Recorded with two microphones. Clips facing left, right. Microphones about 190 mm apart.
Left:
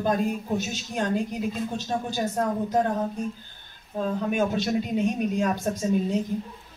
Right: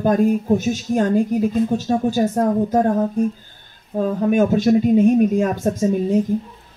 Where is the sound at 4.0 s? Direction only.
45° right (ahead or behind).